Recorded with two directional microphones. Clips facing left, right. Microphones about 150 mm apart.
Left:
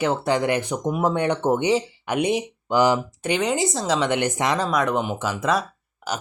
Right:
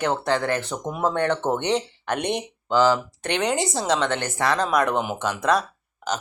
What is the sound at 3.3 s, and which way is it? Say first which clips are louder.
Speech: left 1 dB; centre (ahead or behind).